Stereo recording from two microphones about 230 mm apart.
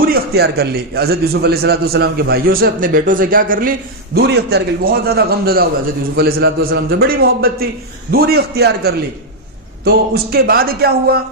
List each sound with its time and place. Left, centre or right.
0.0 s a man's voice: right